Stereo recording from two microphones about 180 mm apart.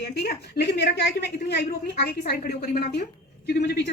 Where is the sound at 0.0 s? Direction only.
65° left (ahead or behind).